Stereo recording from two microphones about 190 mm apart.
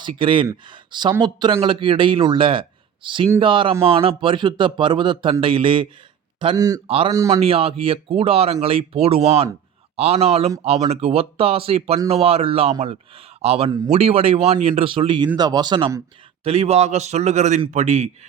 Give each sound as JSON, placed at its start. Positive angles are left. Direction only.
{"t": 0.0, "sound": "speech", "side_deg": -25}
{"t": 6.8, "sound": "a man's voice", "side_deg": -30}
{"t": 7.1, "sound": "speech", "side_deg": -20}
{"t": 7.3, "sound": "a man's voice", "side_deg": -30}
{"t": 13.7, "sound": "speech", "side_deg": -20}
{"t": 13.9, "sound": "a man's voice", "side_deg": -35}